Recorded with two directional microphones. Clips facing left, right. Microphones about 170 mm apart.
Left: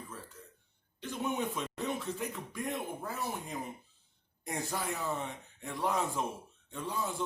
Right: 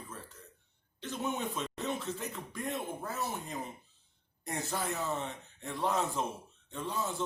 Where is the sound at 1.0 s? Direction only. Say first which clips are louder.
Left 1 dB; 15° left (ahead or behind).